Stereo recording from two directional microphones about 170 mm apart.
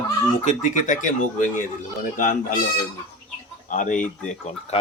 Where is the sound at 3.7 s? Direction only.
50° left (ahead or behind).